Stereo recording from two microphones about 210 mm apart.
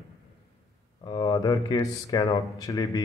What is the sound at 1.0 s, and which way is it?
Speech, 20° left (ahead or behind).